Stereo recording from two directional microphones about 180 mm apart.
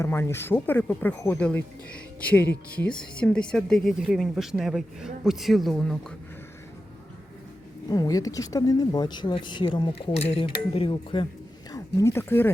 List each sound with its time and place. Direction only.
0.0 s speech: 15° left (ahead or behind)
7.9 s speech: 20° left (ahead or behind)
11.7 s speech: 15° left (ahead or behind)